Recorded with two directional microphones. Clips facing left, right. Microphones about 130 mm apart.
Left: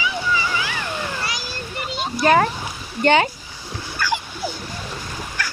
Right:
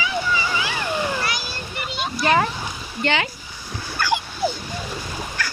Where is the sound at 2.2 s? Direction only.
40° left (ahead or behind).